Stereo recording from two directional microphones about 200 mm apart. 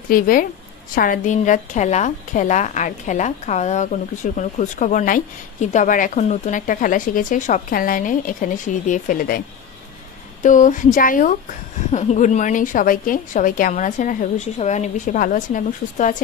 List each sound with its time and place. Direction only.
0.1 s a woman's voice: 45° left (ahead or behind)
10.4 s a woman's voice: 40° left (ahead or behind)